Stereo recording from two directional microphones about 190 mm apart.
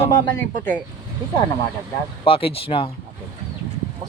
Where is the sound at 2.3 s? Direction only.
30° left (ahead or behind).